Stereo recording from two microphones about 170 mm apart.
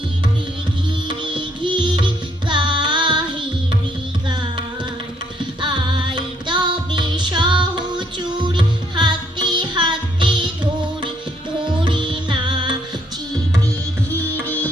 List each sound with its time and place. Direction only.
1.0 s music: 30° right (ahead or behind)
2.5 s child singing: 25° right (ahead or behind)
5.5 s music: 30° right (ahead or behind)
11.6 s music: 30° right (ahead or behind)